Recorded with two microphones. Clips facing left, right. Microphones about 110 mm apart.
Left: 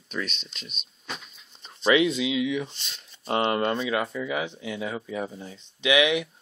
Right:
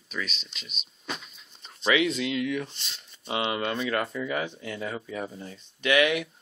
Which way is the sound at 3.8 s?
5° left (ahead or behind).